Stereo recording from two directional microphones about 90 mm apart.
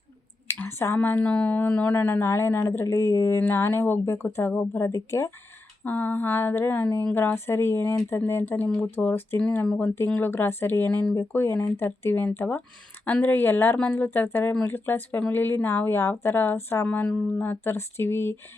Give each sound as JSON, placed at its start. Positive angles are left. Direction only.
{"t": 0.5, "sound": "speech", "side_deg": 25}
{"t": 5.8, "sound": "speech", "side_deg": 20}